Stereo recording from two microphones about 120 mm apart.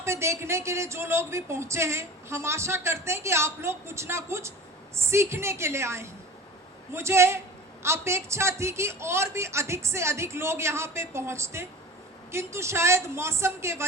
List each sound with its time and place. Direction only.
0.0 s a woman's voice: 25° right (ahead or behind)